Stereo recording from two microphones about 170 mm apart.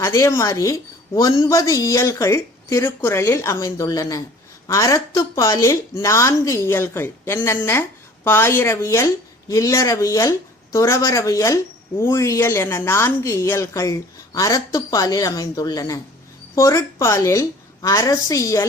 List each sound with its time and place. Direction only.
0.0 s a woman's voice: 20° left (ahead or behind)